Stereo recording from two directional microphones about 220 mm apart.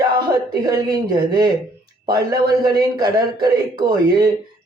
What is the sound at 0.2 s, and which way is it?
A man's voice, 20° right (ahead or behind).